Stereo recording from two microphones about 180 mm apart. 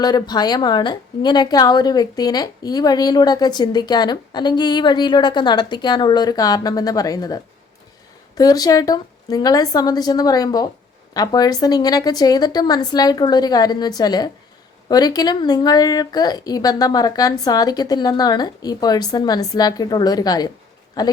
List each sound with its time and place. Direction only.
0.0 s a woman's voice: 25° left (ahead or behind)
8.4 s a woman's voice: 20° left (ahead or behind)